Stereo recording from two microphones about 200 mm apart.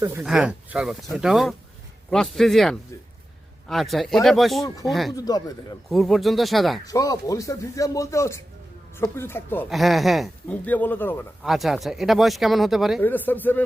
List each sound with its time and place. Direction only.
0.0 s speech: 10° right (ahead or behind)
5.1 s speech: 20° left (ahead or behind)
5.9 s speech: centre (ahead or behind)
6.8 s speech: 15° left (ahead or behind)
9.6 s speech: centre (ahead or behind)
11.4 s speech: centre (ahead or behind)
13.0 s speech: 10° left (ahead or behind)